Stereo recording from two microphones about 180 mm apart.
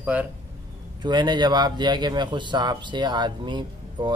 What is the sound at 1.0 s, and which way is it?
A man's voice, 25° right (ahead or behind).